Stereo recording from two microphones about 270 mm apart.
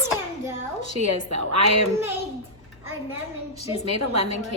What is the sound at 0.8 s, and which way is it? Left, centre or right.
A woman's voice, right.